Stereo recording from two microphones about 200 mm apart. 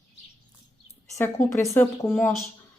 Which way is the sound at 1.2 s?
10° left (ahead or behind).